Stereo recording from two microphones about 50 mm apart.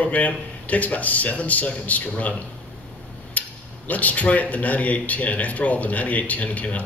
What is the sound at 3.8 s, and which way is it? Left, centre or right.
Speech, left.